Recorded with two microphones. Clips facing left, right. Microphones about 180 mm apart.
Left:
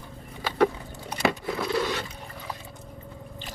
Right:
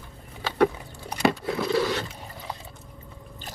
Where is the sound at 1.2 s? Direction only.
Centre (ahead or behind).